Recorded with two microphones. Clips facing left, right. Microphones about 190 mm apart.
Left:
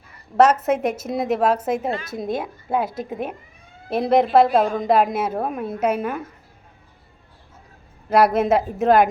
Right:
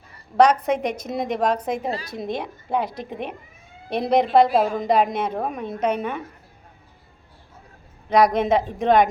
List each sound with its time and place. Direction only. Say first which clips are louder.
0.3 s a woman's voice: left 1 dB; 5° left (ahead or behind)
8.1 s a woman's voice: left 1 dB; 5° left (ahead or behind)